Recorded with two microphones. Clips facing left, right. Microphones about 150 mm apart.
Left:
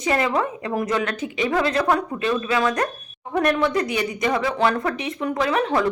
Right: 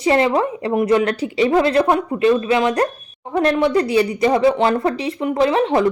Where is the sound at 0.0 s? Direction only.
30° right (ahead or behind).